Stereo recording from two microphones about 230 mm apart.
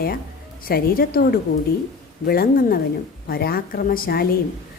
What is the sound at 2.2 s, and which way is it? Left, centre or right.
Speech, left.